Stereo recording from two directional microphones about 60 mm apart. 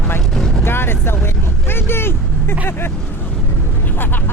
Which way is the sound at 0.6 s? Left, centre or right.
Left.